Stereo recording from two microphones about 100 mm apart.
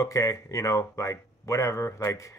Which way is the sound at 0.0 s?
30° left (ahead or behind).